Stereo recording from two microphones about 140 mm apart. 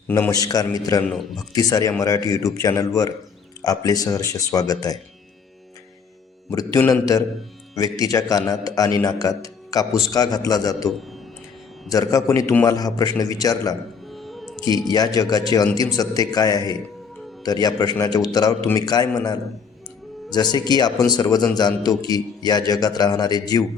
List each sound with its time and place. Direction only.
0.3 s a man's voice: 25° left (ahead or behind)
1.0 s speech: centre (ahead or behind)
1.5 s a man's voice: 25° left (ahead or behind)
6.5 s a man's voice: 20° left (ahead or behind)
11.9 s a man's voice: 25° left (ahead or behind)
14.1 s music: centre (ahead or behind)
14.8 s a man's voice: 25° left (ahead or behind)